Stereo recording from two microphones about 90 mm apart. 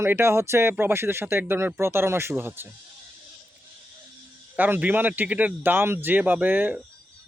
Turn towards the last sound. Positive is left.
turn(degrees=-20)  # may be behind; listen again after turning